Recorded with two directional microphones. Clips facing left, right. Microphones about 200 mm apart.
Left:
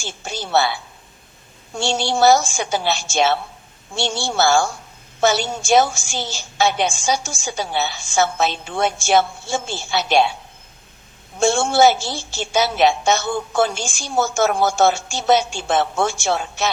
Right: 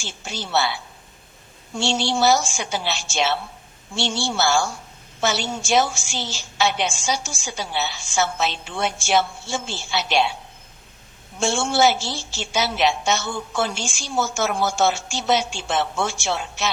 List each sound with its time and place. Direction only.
0.0 s a woman's voice: 50° left (ahead or behind)
1.8 s a woman's voice: 50° left (ahead or behind)
11.3 s a woman's voice: 50° left (ahead or behind)